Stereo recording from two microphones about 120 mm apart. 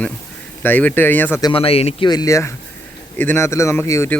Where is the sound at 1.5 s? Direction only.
55° left (ahead or behind).